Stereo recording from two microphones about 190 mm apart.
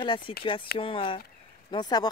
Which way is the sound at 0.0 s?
25° left (ahead or behind).